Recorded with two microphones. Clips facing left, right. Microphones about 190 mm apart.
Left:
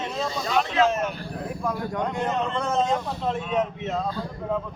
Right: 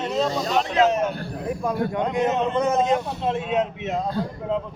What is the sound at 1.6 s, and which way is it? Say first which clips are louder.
Speech: right 3 dB; 20° right (ahead or behind).